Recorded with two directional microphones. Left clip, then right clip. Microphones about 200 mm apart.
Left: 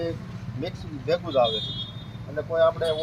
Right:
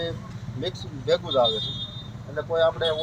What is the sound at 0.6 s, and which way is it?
Speech, 20° right (ahead or behind).